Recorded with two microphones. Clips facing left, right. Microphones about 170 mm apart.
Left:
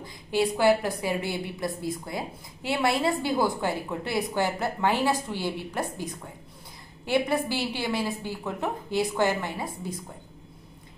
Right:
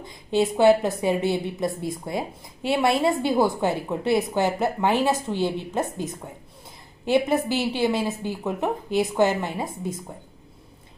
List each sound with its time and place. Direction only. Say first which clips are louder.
0.0 s a woman's voice: right 3 dB; 20° right (ahead or behind)